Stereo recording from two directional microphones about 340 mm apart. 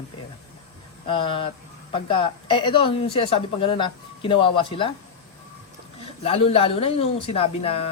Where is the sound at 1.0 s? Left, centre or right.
Centre.